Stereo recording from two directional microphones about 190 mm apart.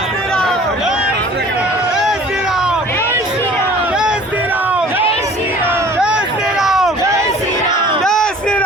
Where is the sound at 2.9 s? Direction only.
10° left (ahead or behind).